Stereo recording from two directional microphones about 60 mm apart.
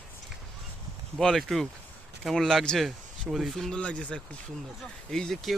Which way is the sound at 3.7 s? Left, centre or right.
Centre.